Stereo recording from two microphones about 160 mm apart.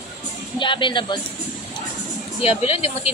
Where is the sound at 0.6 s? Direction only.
30° left (ahead or behind).